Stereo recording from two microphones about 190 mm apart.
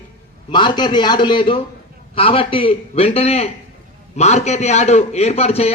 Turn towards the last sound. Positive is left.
turn(degrees=35)  # may be behind; listen again after turning